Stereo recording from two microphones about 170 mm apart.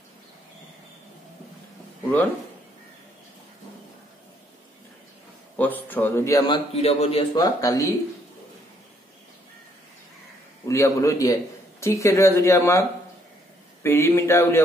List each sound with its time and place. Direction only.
5.6 s a man's voice: 10° left (ahead or behind); by 7.2 s 35° left (ahead or behind)
7.3 s a man's voice: 20° left (ahead or behind)
10.7 s a man's voice: 15° left (ahead or behind)
13.8 s speech: 15° left (ahead or behind)